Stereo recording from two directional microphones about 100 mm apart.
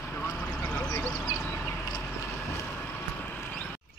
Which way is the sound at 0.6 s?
20° left (ahead or behind).